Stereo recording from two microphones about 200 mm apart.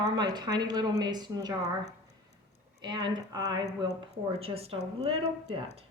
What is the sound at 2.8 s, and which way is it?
A woman's voice, 20° right (ahead or behind).